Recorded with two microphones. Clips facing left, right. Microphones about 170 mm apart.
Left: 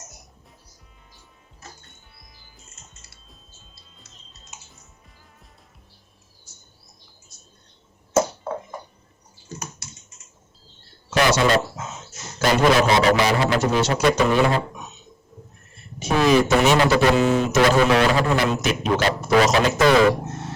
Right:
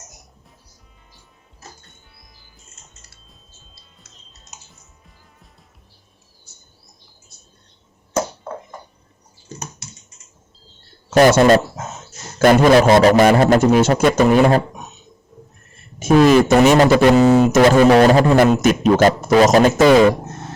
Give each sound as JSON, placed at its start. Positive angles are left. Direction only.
{"t": 11.1, "sound": "a sound", "side_deg": -45}
{"t": 12.4, "sound": "a man's voice", "side_deg": -50}
{"t": 16.0, "sound": "a man's voice", "side_deg": -45}